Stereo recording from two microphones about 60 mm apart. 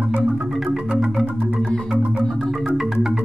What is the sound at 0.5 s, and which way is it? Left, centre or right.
Marimba, centre.